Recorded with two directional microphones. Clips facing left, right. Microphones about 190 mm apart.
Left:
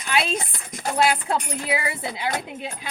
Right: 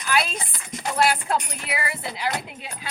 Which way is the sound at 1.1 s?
25° left (ahead or behind).